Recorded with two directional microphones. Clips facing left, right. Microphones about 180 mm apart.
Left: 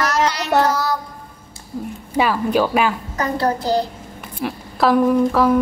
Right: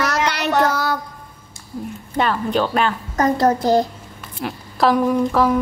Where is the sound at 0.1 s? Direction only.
60° right (ahead or behind).